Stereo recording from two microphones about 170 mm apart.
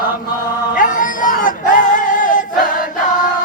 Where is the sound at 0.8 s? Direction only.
50° left (ahead or behind).